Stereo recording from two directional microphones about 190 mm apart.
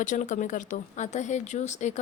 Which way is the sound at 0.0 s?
40° left (ahead or behind).